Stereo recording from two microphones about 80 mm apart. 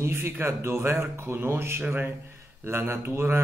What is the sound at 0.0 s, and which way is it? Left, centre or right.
Speech, right.